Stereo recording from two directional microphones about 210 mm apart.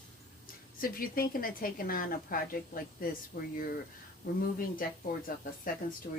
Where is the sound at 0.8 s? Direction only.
45° left (ahead or behind).